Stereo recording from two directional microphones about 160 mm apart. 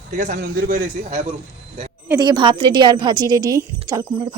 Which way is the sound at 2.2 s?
30° right (ahead or behind).